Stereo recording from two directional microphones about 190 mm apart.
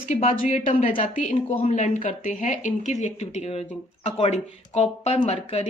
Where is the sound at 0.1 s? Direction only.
35° left (ahead or behind).